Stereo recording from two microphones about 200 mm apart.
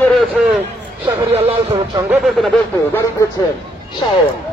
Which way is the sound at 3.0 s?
15° left (ahead or behind).